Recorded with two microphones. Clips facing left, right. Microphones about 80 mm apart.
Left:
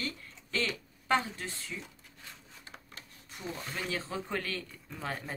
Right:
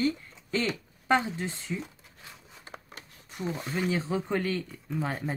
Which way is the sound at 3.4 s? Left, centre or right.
Centre.